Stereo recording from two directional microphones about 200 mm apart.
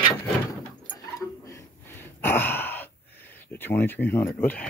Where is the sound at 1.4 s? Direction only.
15° left (ahead or behind).